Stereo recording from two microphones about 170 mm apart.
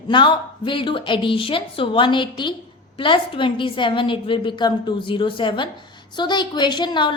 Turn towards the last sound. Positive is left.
turn(degrees=25)  # may be behind; listen again after turning